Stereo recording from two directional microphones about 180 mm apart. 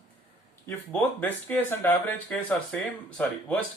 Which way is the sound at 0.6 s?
10° left (ahead or behind).